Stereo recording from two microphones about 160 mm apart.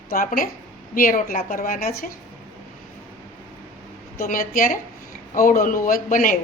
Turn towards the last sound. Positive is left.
turn(degrees=55)  # may be behind; listen again after turning